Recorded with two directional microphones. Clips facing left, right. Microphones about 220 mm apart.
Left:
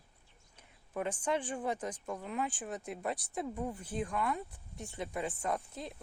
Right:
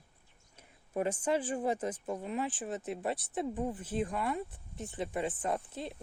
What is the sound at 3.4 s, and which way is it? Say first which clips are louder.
Speech: right 3 dB; 15° right (ahead or behind).